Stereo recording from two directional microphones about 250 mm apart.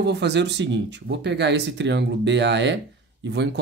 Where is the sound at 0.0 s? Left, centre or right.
Right.